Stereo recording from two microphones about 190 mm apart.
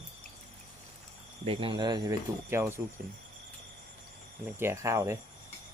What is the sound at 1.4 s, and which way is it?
Speech, 25° right (ahead or behind).